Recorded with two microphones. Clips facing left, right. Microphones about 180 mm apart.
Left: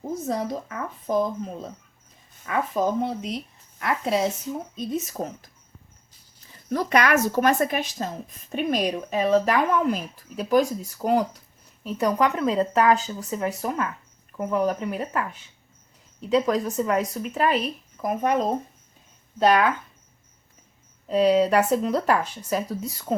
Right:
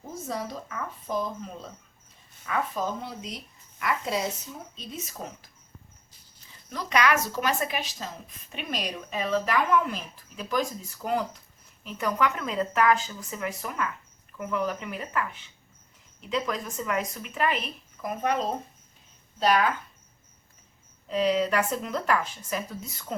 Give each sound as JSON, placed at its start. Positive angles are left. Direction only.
{"t": 0.3, "sound": "speech", "side_deg": 45}
{"t": 4.8, "sound": "speech", "side_deg": 45}
{"t": 6.7, "sound": "speech", "side_deg": 50}
{"t": 19.4, "sound": "speech", "side_deg": 55}
{"t": 21.1, "sound": "speech", "side_deg": 35}